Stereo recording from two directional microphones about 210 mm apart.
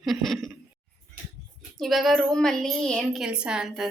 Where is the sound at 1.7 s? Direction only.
Centre (ahead or behind).